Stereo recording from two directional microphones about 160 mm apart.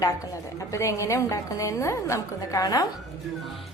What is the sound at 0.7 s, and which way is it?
A woman's voice, 20° left (ahead or behind).